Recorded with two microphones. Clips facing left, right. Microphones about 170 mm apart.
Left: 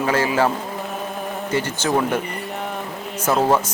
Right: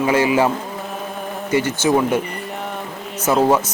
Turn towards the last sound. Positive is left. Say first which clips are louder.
# right 2 dB
turn(degrees=-5)  # may be behind; listen again after turning